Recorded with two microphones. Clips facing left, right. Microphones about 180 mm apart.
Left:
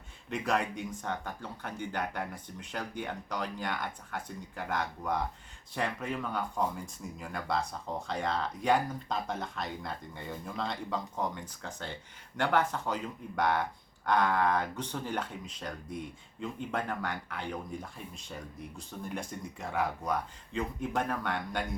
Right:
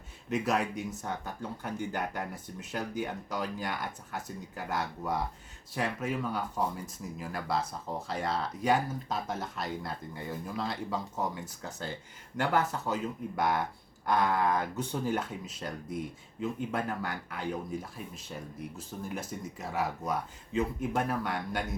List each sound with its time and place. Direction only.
0.3 s speech: 5° right (ahead or behind)